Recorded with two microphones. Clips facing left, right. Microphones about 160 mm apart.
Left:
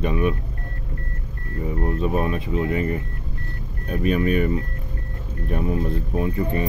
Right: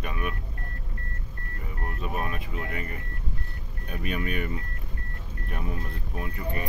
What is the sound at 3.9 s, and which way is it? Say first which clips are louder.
Speech: left 11 dB; 35° left (ahead or behind).